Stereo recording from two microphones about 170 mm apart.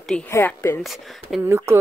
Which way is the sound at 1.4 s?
15° right (ahead or behind).